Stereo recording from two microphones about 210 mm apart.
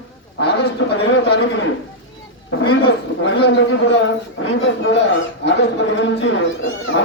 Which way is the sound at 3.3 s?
55° left (ahead or behind).